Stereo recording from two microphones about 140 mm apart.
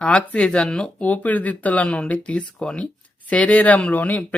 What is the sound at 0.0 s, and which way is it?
Speech, 10° left (ahead or behind).